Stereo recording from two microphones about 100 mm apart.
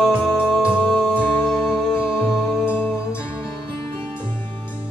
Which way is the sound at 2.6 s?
20° left (ahead or behind).